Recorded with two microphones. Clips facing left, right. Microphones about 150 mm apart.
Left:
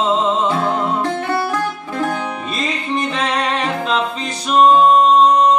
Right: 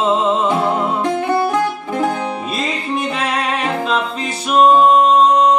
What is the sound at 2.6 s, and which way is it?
Music, 5° right (ahead or behind).